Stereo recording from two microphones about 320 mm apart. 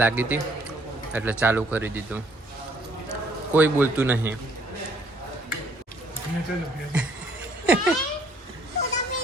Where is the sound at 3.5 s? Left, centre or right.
Centre.